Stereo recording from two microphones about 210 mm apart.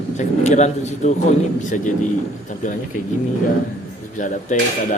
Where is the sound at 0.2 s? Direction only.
35° left (ahead or behind).